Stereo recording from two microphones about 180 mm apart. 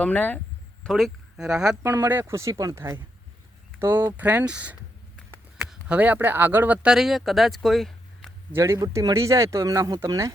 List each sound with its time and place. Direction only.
0.0 s speech: 10° left (ahead or behind)
8.5 s speech: 15° right (ahead or behind)